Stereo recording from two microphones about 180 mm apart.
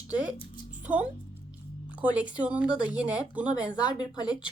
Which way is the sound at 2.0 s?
5° right (ahead or behind).